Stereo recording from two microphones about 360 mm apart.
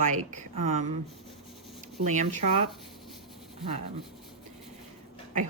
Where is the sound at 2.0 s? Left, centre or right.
Centre.